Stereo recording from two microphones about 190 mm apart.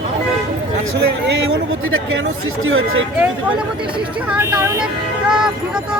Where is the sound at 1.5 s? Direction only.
90° right.